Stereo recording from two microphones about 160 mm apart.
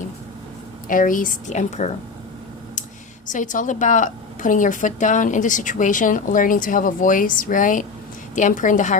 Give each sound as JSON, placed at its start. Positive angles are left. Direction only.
{"t": 0.9, "sound": "a woman's voice", "side_deg": 55}
{"t": 3.2, "sound": "a woman's voice", "side_deg": 55}